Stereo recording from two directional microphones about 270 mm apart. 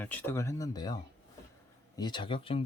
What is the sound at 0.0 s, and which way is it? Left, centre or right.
Speech, centre.